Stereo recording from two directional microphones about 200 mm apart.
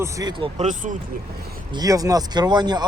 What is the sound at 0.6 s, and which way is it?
Speech, 40° right (ahead or behind).